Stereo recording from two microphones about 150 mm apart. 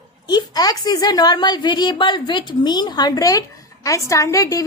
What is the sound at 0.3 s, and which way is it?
A woman's voice, 25° left (ahead or behind).